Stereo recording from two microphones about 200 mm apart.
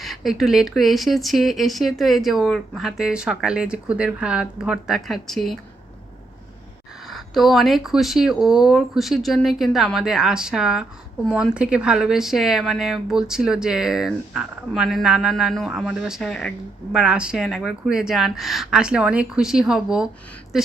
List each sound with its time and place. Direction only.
0.0 s speech: centre (ahead or behind)
7.1 s speech: centre (ahead or behind)